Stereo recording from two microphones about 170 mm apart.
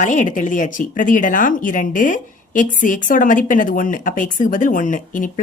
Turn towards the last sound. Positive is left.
turn(degrees=50)  # may be behind; listen again after turning